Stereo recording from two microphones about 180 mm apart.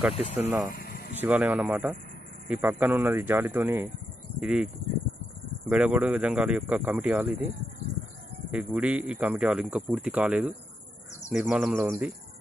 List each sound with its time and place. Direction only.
0.1 s speech: 35° left (ahead or behind)
0.4 s speech: 10° right (ahead or behind)
0.7 s a sound: 55° left (ahead or behind)
1.2 s speech: 10° right (ahead or behind)
5.7 s speech: 5° right (ahead or behind)
8.5 s speech: 5° right (ahead or behind)